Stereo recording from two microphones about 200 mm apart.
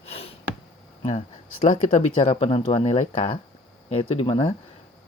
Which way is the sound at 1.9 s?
25° left (ahead or behind).